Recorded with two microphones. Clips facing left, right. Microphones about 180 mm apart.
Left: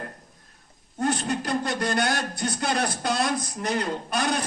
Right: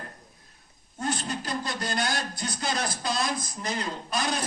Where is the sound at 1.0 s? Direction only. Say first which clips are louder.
Left 5 dB; 65° left (ahead or behind).